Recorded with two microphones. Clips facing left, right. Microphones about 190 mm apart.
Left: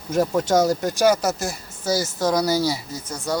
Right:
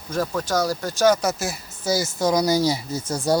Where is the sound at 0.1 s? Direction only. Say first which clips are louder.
Left 5 dB; 20° left (ahead or behind).